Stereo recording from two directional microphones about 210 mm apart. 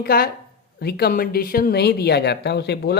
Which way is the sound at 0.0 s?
45° left (ahead or behind).